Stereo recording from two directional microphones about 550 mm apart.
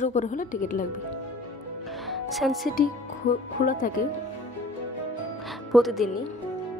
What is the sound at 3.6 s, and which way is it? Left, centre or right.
Speech, centre.